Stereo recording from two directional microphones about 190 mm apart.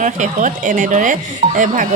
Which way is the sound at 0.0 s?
40° right (ahead or behind).